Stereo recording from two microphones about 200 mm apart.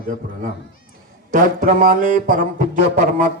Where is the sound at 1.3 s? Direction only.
40° right (ahead or behind).